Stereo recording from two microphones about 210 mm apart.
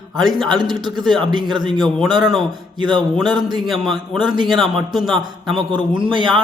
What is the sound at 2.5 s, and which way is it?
Speech, 20° right (ahead or behind).